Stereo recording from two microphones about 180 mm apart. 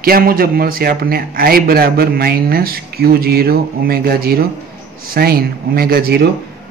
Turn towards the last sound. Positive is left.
turn(degrees=-55)  # may be behind; listen again after turning